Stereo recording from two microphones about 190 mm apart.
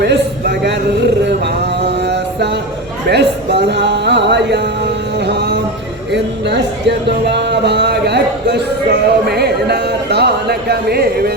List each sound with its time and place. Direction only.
0.0 s speech: 60° right (ahead or behind)
1.2 s a sound: 60° right (ahead or behind)
3.1 s music: 60° right (ahead or behind)
6.1 s speech: 65° right (ahead or behind)